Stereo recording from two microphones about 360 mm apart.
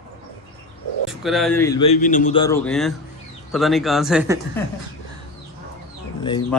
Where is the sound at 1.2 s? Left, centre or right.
Centre.